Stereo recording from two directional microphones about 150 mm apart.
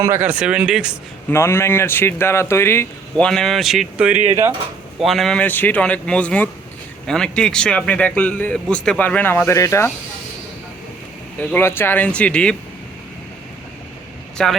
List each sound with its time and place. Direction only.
0.0 s speech: 15° right (ahead or behind)
1.3 s a man's voice: 15° left (ahead or behind)
3.2 s a man's voice: 5° left (ahead or behind); by 9.9 s 20° left (ahead or behind)
11.3 s a man's voice: 15° left (ahead or behind)
14.4 s speech: 5° left (ahead or behind)